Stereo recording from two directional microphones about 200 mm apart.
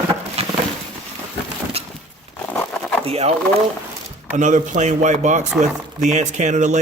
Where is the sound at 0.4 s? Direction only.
30° right (ahead or behind).